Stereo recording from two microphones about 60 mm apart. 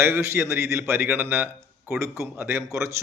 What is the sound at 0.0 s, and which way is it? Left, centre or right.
A man's voice, right.